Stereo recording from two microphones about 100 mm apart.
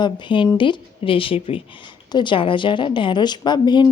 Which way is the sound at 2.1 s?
55° left (ahead or behind).